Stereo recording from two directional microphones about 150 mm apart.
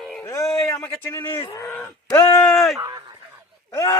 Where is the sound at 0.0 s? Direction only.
5° left (ahead or behind).